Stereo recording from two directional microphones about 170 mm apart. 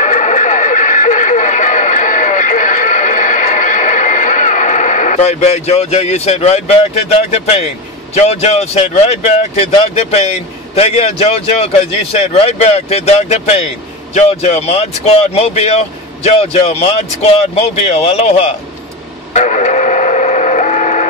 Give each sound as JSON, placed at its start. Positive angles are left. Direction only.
{"t": 0.0, "sound": "radio", "side_deg": 45}
{"t": 14.1, "sound": "speech", "side_deg": 40}
{"t": 19.3, "sound": "printer", "side_deg": 45}